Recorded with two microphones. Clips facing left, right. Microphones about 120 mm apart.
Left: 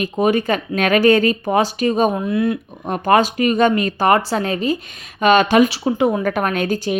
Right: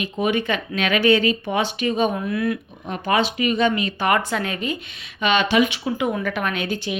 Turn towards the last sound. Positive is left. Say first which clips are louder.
# left 6 dB
turn(degrees=40)  # may be behind; listen again after turning